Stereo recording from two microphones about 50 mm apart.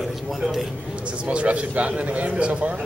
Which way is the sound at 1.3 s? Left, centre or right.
Right.